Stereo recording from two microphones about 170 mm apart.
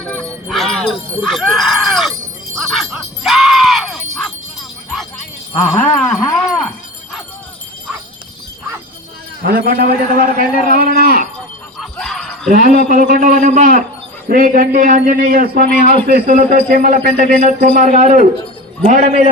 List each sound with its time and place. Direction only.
0.0 s jingle bell: 5° left (ahead or behind)
1.2 s speech: centre (ahead or behind)
2.6 s music: centre (ahead or behind)
5.8 s a sound: 5° left (ahead or behind)
9.4 s speech: 65° right (ahead or behind)
11.8 s jingle bell: centre (ahead or behind)
12.5 s speech: 55° right (ahead or behind)